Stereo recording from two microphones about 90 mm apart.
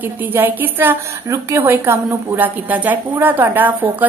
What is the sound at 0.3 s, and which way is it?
A woman's voice, 25° right (ahead or behind).